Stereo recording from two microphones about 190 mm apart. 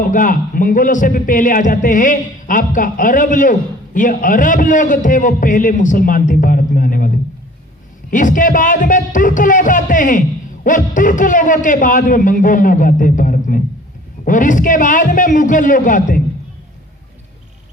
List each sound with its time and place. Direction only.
0.0 s speech: 45° left (ahead or behind)
8.1 s speech: 45° left (ahead or behind)